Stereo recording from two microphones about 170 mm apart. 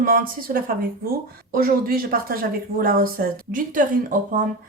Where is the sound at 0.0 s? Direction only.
55° right (ahead or behind).